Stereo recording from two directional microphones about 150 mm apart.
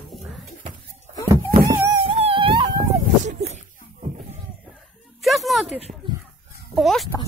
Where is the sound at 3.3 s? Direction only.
50° right (ahead or behind).